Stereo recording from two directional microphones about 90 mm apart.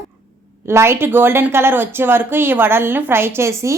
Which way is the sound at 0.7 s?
30° right (ahead or behind).